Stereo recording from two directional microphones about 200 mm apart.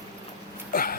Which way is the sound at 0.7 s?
45° left (ahead or behind).